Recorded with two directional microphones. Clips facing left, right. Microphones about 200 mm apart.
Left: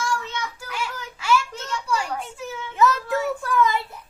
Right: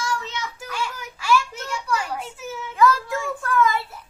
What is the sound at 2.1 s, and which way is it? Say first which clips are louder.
Children playing: even; 5° right (ahead or behind).